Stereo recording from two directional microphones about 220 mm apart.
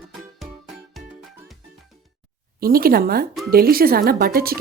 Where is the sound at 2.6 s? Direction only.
40° right (ahead or behind).